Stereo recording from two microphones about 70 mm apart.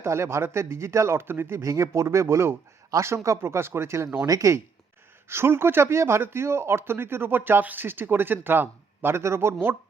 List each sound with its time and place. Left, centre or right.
0.0 s speech: right
5.3 s speech: right